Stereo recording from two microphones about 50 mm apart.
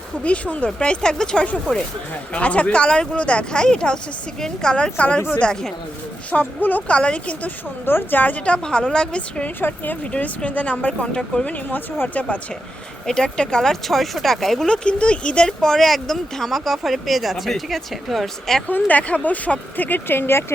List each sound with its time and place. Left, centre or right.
0.2 s a woman's voice: left
6.3 s speech: left
6.9 s a woman's voice: left
7.4 s a woman's voice: left
9.6 s a woman's voice: left; by 11.4 s centre
11.4 s a woman's voice: left
13.1 s speech: centre
14.7 s speech: left; by 18.6 s centre
18.7 s speech: left